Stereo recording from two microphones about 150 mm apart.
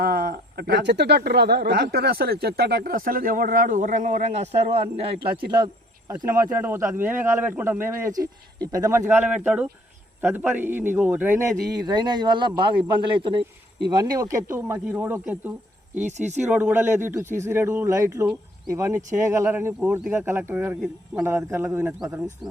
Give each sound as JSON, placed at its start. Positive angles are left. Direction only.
{"t": 0.0, "sound": "speech", "side_deg": -90}
{"t": 5.5, "sound": "speech", "side_deg": -25}
{"t": 11.9, "sound": "a man's voice", "side_deg": -30}
{"t": 13.9, "sound": "speech", "side_deg": -25}
{"t": 16.0, "sound": "speech", "side_deg": -50}
{"t": 16.5, "sound": "speech", "side_deg": -10}